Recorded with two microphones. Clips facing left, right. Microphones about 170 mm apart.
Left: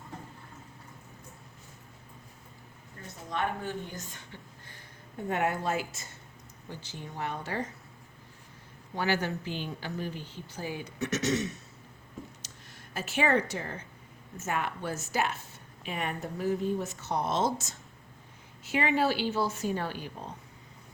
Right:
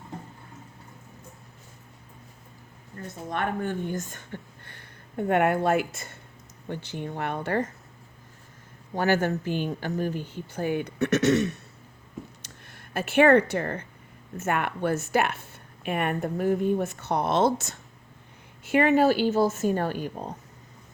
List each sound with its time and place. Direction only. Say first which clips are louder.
3.2 s a woman's voice: right 4 dB; 55° right (ahead or behind)
9.0 s speech: right 6 dB; 50° right (ahead or behind)
12.4 s a sound: right 2 dB; 60° right (ahead or behind)
14.3 s a woman's voice: right 5 dB; 60° right (ahead or behind)